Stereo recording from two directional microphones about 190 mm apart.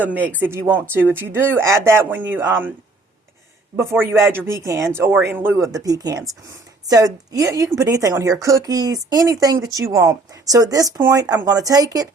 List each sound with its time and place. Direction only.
0.0 s speech: 10° right (ahead or behind)
3.8 s speech: 15° right (ahead or behind)